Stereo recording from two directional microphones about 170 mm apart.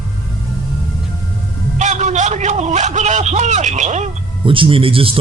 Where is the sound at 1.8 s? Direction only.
45° right (ahead or behind).